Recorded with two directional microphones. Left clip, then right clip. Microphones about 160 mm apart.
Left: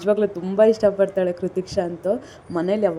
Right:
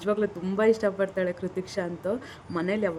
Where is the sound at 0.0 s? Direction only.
5° left (ahead or behind).